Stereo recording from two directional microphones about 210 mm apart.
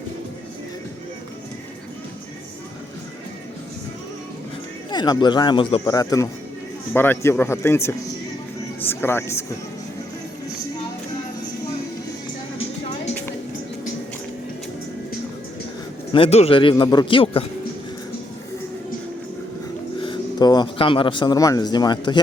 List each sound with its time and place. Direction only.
4.9 s a man's voice: 20° left (ahead or behind)
16.1 s a man's voice: 30° left (ahead or behind)
20.0 s speech: 20° left (ahead or behind)